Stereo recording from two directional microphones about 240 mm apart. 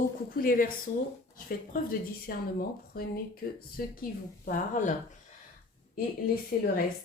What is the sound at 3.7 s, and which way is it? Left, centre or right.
Speech, left.